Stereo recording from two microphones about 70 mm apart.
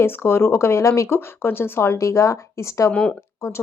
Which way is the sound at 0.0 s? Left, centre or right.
Left.